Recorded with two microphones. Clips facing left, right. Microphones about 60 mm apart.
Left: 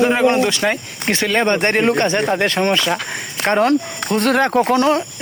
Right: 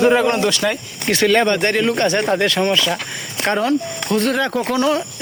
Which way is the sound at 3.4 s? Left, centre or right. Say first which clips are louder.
Left 2 dB; left.